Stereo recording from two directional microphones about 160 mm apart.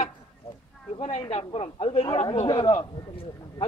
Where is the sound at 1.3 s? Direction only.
40° left (ahead or behind).